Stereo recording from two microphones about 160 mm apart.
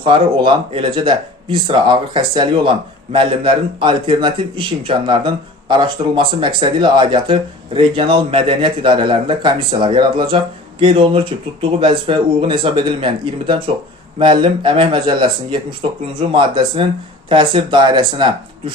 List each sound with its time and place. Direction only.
0.0 s speech: 30° right (ahead or behind)
14.2 s speech: 30° right (ahead or behind)